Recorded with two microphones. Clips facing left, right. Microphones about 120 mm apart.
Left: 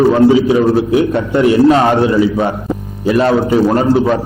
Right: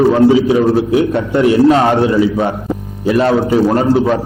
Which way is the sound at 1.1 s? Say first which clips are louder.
Even; 20° left (ahead or behind).